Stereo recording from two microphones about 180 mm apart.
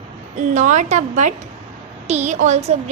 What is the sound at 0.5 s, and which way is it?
A child's voice, 40° right (ahead or behind).